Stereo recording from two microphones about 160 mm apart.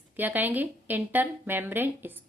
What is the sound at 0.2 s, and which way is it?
A woman's voice, 10° right (ahead or behind).